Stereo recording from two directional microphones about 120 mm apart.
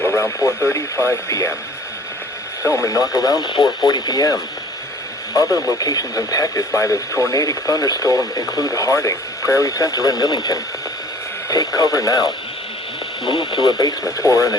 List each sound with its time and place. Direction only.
0.2 s speech: 20° left (ahead or behind)
2.6 s speech: 20° left (ahead or behind); by 13.7 s 40° left (ahead or behind)
14.2 s speech: 25° left (ahead or behind)